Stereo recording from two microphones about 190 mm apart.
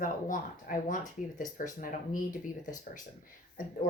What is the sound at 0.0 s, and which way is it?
Speech, 45° left (ahead or behind).